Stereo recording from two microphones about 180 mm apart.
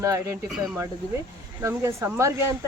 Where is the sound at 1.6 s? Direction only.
15° right (ahead or behind).